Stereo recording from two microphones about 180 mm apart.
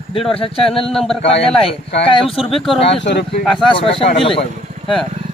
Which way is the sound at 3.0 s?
70° left (ahead or behind).